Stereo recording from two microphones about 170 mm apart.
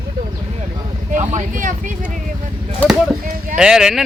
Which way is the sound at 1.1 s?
45° right (ahead or behind).